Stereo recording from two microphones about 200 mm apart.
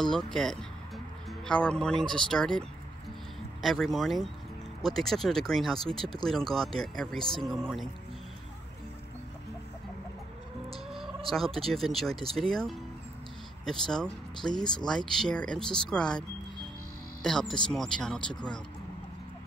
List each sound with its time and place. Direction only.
0.0 s speech: 5° left (ahead or behind)
3.6 s speech: centre (ahead or behind)
11.3 s speech: centre (ahead or behind)
17.2 s speech: 5° left (ahead or behind)